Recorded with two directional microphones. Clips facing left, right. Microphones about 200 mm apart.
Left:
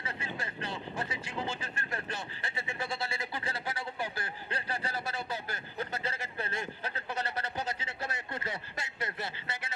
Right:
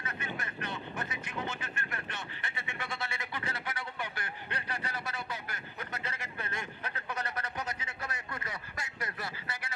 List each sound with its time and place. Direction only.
0.0 s vehicle: 30° left (ahead or behind)